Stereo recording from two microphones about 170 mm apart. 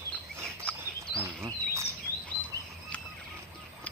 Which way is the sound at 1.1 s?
15° right (ahead or behind).